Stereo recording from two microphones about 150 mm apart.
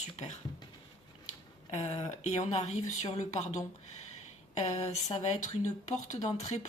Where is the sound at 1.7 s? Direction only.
50° left (ahead or behind).